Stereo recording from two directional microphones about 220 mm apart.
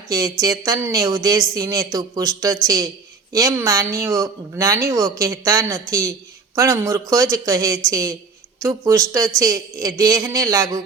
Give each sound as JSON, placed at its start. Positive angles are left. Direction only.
{"t": 0.1, "sound": "speech", "side_deg": -15}